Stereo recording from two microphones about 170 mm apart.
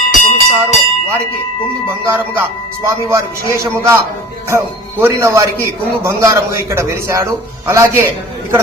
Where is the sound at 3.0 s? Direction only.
15° right (ahead or behind).